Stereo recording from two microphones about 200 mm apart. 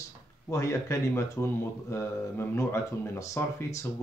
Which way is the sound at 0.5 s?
15° left (ahead or behind).